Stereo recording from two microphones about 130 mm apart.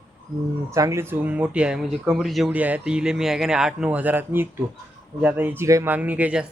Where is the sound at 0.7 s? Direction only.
25° right (ahead or behind).